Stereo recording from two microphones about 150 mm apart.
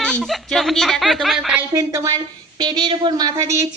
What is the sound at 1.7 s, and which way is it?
A woman's voice, 20° right (ahead or behind).